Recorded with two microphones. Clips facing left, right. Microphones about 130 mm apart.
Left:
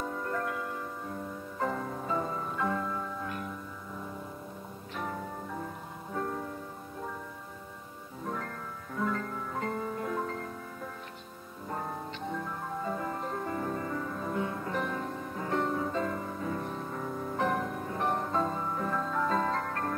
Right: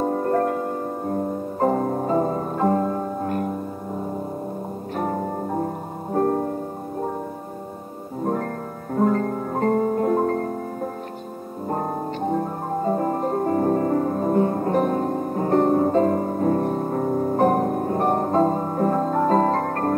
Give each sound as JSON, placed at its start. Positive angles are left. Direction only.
{"t": 0.0, "sound": "music", "side_deg": -45}
{"t": 4.9, "sound": "music", "side_deg": -45}
{"t": 8.2, "sound": "music", "side_deg": -45}